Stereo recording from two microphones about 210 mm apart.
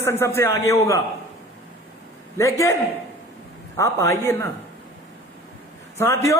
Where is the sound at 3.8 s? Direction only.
15° left (ahead or behind).